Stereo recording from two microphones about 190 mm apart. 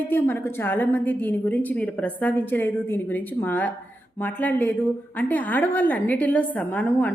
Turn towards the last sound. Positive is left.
turn(degrees=10)  # may be behind; listen again after turning